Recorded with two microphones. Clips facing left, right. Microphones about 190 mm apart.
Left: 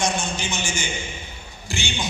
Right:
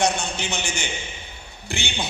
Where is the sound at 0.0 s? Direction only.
60° right (ahead or behind).